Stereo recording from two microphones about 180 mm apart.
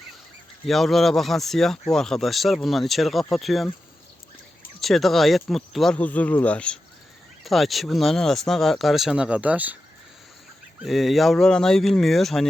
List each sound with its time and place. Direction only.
0.6 s speech: centre (ahead or behind)
4.8 s speech: centre (ahead or behind)
10.8 s speech: centre (ahead or behind)